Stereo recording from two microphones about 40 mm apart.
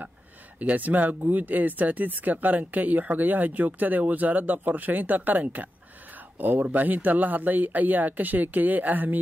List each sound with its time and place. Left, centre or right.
0.6 s speech: right